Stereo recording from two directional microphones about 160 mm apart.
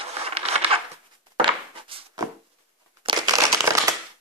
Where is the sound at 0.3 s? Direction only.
40° right (ahead or behind).